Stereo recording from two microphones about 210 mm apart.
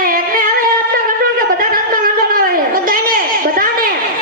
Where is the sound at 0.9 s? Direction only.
40° right (ahead or behind).